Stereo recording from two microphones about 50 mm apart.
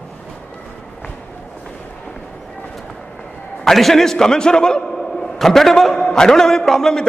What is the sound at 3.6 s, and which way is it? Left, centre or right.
A man's voice, centre.